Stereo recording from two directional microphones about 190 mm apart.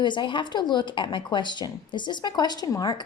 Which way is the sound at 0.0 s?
25° left (ahead or behind).